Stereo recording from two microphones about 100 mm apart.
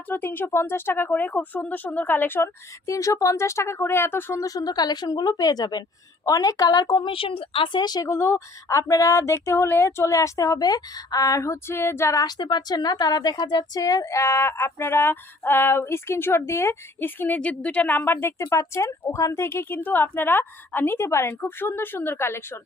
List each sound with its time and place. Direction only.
0.1 s a woman's voice: 20° left (ahead or behind); by 7.1 s 45° left (ahead or behind)
7.1 s speech: 60° left (ahead or behind); by 8.0 s 45° left (ahead or behind)
8.0 s speech: 25° left (ahead or behind)
12.2 s a woman's voice: 45° left (ahead or behind); by 22.5 s 25° left (ahead or behind)